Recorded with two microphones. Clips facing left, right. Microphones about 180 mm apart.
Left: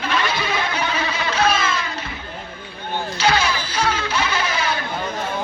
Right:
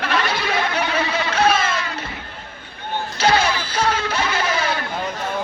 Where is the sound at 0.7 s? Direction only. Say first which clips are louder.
Right 2 dB; 60° right (ahead or behind).